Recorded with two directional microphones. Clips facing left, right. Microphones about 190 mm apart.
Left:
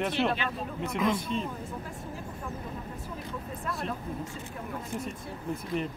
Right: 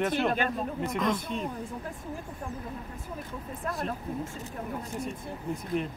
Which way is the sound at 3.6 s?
45° right (ahead or behind).